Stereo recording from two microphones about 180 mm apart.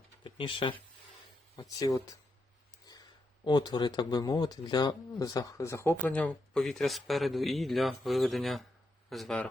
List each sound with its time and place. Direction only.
0.3 s speech: 30° left (ahead or behind)
3.4 s speech: 25° left (ahead or behind); by 9.5 s 5° left (ahead or behind)